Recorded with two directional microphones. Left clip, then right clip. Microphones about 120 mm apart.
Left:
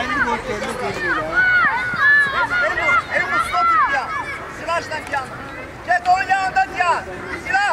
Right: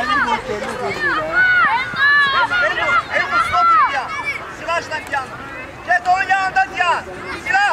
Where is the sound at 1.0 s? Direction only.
25° right (ahead or behind).